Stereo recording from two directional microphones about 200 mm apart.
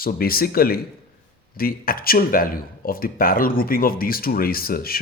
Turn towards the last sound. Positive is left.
turn(degrees=50)  # may be behind; listen again after turning